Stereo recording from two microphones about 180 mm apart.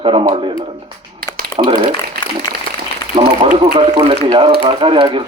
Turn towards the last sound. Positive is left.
turn(degrees=-30)  # may be behind; listen again after turning